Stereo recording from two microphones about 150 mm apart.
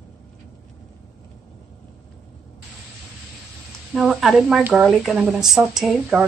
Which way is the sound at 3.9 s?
Centre (ahead or behind).